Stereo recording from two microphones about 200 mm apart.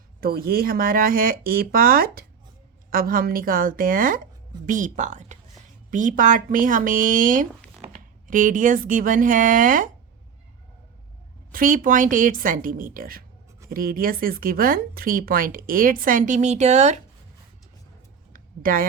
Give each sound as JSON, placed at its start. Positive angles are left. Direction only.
{"t": 0.2, "sound": "a woman's voice", "side_deg": -50}
{"t": 11.5, "sound": "a woman's voice", "side_deg": -45}
{"t": 18.3, "sound": "a sound", "side_deg": -45}